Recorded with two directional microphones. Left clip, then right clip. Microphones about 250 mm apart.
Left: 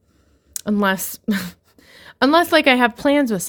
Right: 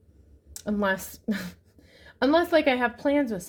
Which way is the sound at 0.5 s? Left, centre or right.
Left.